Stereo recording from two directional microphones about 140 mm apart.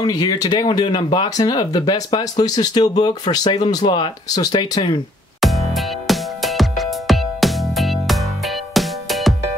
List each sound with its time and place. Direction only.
0.0 s speech: 30° left (ahead or behind)
5.4 s music: centre (ahead or behind)